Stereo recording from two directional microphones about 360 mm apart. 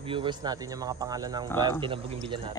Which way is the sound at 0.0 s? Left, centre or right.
Centre.